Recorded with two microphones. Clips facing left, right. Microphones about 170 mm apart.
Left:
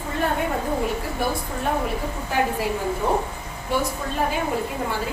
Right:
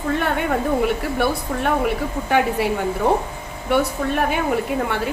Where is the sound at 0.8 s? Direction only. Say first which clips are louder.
Right 5 dB; 70° right (ahead or behind).